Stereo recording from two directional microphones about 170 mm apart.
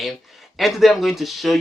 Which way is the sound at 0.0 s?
Centre (ahead or behind).